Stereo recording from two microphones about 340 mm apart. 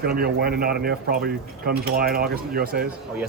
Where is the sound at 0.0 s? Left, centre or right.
Right.